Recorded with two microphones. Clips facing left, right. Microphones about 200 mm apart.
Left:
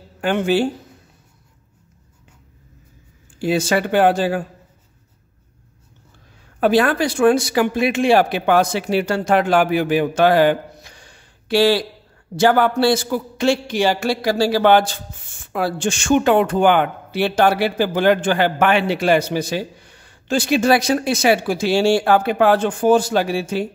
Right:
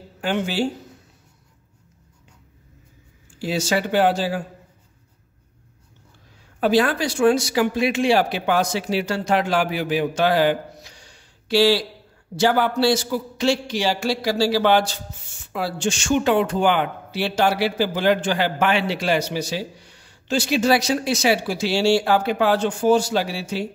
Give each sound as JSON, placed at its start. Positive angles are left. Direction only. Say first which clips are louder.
{"t": 0.2, "sound": "a man's voice", "louder": "left 5 dB", "side_deg": 55}
{"t": 3.3, "sound": "a man's voice", "louder": "left 4 dB", "side_deg": 55}
{"t": 6.6, "sound": "a man's voice", "louder": "left 3 dB", "side_deg": 55}